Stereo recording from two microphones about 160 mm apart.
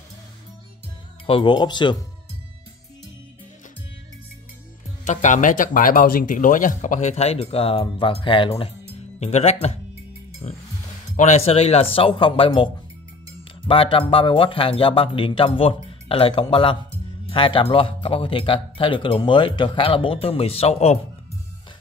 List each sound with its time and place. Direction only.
1.2 s speech: 30° left (ahead or behind)
5.0 s speech: 50° left (ahead or behind)